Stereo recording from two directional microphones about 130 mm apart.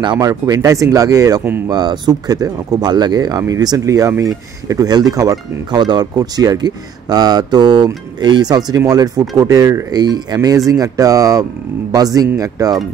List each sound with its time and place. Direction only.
0.0 s speech: 30° right (ahead or behind)